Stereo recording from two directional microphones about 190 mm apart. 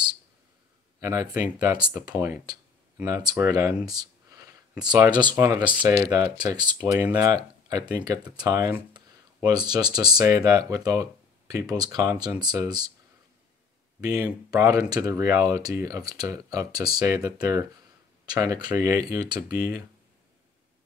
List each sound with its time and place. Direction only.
1.0 s speech: 15° right (ahead or behind)
14.0 s speech: 20° right (ahead or behind)